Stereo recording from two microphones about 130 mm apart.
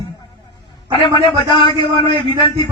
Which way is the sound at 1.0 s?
40° left (ahead or behind).